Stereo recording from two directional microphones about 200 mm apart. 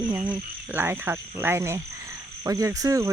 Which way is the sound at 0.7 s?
10° right (ahead or behind).